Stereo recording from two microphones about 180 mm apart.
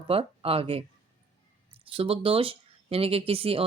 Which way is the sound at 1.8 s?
30° right (ahead or behind).